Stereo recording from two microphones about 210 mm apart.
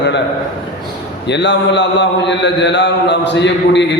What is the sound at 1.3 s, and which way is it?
A man's voice, 60° left (ahead or behind).